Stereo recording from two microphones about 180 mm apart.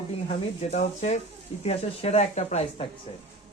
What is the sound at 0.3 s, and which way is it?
Speech, 40° left (ahead or behind).